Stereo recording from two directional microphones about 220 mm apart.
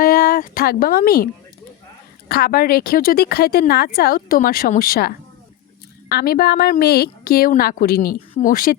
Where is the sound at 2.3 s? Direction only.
45° left (ahead or behind).